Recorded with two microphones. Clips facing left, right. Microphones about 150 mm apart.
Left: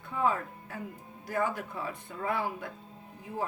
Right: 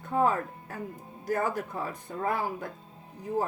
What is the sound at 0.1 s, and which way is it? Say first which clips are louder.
Speech: right 4 dB; 45° right (ahead or behind).